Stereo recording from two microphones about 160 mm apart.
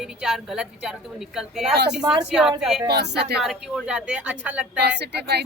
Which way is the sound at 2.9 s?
90° right.